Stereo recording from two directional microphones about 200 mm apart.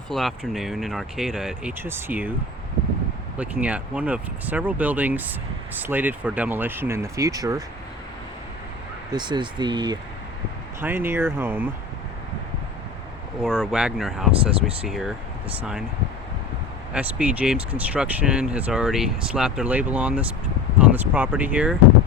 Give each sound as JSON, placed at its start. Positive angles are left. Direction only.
{"t": 0.1, "sound": "speech", "side_deg": 0}
{"t": 3.3, "sound": "speech", "side_deg": -5}
{"t": 9.1, "sound": "speech", "side_deg": -25}
{"t": 10.8, "sound": "speech", "side_deg": -10}
{"t": 13.4, "sound": "speech", "side_deg": -5}
{"t": 16.9, "sound": "speech", "side_deg": -5}